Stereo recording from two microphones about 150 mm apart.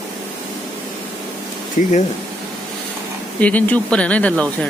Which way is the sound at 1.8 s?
60° left (ahead or behind).